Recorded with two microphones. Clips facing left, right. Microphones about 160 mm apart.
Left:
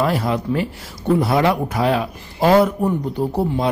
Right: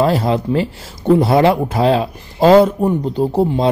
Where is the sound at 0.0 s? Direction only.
30° right (ahead or behind).